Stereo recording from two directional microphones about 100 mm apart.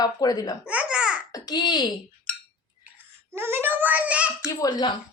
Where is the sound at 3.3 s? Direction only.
25° right (ahead or behind).